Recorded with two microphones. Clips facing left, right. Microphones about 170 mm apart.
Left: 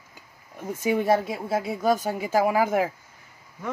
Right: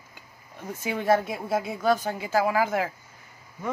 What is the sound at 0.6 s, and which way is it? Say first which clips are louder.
Speech: left 6 dB; 15° left (ahead or behind).